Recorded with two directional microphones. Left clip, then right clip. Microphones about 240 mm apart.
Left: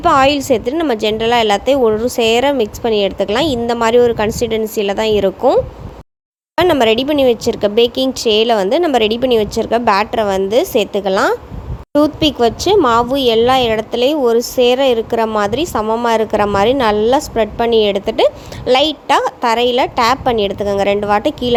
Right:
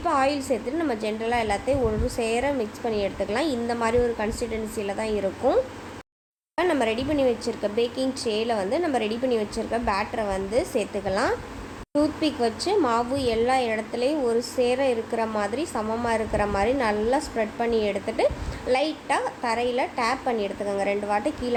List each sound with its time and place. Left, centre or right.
0.0 s a woman's voice: left
6.6 s a woman's voice: left